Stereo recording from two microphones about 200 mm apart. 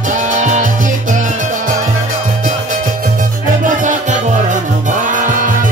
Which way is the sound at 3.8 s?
35° right (ahead or behind).